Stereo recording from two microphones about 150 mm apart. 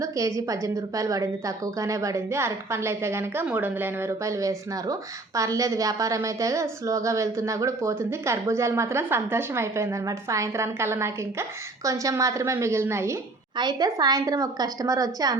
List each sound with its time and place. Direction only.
0.0 s a woman's voice: 20° right (ahead or behind)
13.6 s a woman's voice: 30° right (ahead or behind)